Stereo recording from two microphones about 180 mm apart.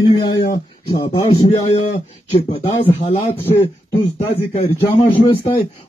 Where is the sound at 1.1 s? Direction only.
30° left (ahead or behind).